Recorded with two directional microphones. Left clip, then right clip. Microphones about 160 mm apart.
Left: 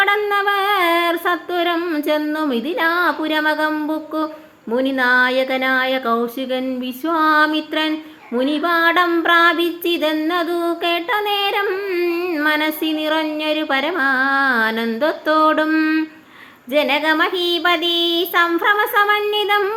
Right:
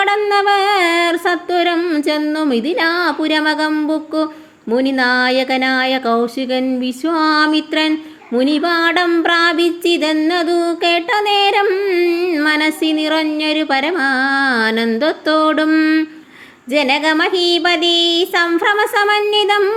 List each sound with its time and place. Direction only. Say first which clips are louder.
0.0 s music: right 3 dB; 35° right (ahead or behind)
4.7 s speech: right 1 dB; 40° right (ahead or behind)